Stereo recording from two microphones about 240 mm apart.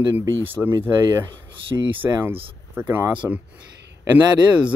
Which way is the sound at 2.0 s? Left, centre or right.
Centre.